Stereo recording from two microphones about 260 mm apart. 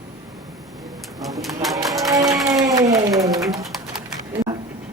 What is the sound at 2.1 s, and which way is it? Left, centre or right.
Music, centre.